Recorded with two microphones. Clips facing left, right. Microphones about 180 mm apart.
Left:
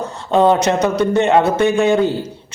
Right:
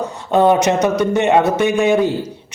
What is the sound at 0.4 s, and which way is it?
A man's voice, 15° right (ahead or behind).